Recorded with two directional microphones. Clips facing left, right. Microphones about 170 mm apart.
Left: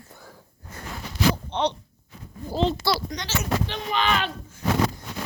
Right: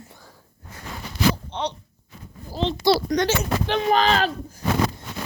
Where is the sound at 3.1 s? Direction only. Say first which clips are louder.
Right 6 dB; 55° right (ahead or behind).